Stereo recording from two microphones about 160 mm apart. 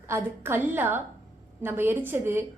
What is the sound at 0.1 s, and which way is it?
A woman's voice, 15° right (ahead or behind).